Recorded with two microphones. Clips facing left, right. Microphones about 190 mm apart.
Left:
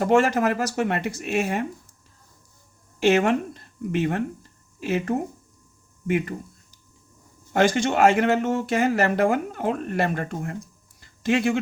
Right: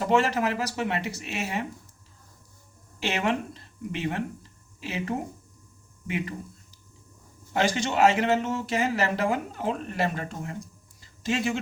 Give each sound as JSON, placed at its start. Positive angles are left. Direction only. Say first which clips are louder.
{"t": 0.0, "sound": "speech", "louder": "left 4 dB", "side_deg": 50}
{"t": 3.0, "sound": "speech", "louder": "left 8 dB", "side_deg": 50}
{"t": 7.5, "sound": "speech", "louder": "left 5 dB", "side_deg": 50}
{"t": 11.0, "sound": "a sound", "louder": "left 6 dB", "side_deg": 60}